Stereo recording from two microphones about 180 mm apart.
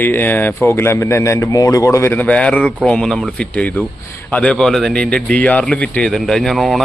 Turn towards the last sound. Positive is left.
turn(degrees=0)  # may be behind; listen again after turning